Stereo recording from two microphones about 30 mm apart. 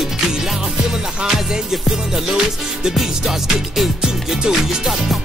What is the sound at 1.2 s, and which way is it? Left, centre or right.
Music, centre.